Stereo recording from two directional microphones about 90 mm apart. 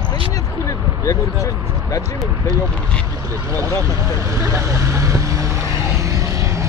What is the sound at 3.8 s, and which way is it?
Vehicle, 35° right (ahead or behind).